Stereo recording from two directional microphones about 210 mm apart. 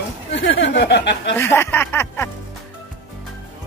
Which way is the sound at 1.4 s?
10° left (ahead or behind).